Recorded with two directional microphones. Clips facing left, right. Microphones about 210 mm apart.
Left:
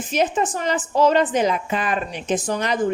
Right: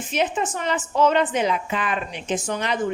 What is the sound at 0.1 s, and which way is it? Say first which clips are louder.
A woman's voice: left 3 dB; 40° left (ahead or behind).